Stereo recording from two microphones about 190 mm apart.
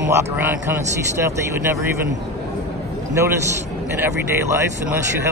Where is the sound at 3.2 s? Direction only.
15° right (ahead or behind).